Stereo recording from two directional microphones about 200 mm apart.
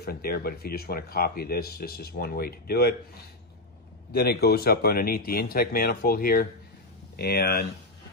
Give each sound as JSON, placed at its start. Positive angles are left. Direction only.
{"t": 0.0, "sound": "speech", "side_deg": 50}
{"t": 4.1, "sound": "speech", "side_deg": 50}